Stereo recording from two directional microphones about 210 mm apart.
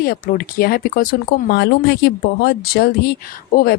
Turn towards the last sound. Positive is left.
turn(degrees=45)  # may be behind; listen again after turning